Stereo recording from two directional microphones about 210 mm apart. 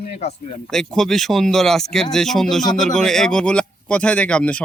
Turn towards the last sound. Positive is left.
turn(degrees=5)  # may be behind; listen again after turning